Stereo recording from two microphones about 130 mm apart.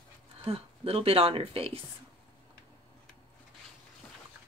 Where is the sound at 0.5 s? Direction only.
50° right (ahead or behind).